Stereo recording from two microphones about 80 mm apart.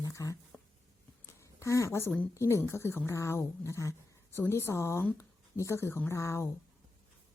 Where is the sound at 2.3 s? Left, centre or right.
Left.